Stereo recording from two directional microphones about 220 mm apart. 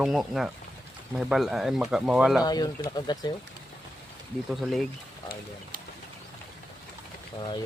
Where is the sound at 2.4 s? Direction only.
15° left (ahead or behind).